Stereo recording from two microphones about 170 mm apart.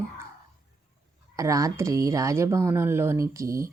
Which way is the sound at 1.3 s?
20° right (ahead or behind).